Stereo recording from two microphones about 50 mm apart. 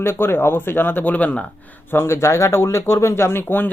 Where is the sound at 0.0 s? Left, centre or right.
Left.